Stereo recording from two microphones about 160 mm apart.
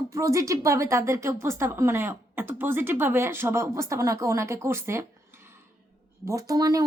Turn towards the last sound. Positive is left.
turn(degrees=-20)  # may be behind; listen again after turning